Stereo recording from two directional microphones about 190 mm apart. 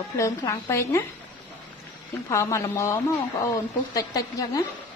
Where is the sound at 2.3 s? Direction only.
15° left (ahead or behind).